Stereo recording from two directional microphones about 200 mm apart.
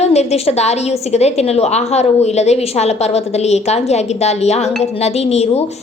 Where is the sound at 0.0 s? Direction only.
35° left (ahead or behind).